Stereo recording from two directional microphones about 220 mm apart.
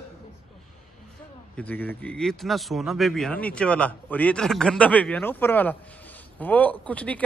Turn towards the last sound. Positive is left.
turn(degrees=5)  # may be behind; listen again after turning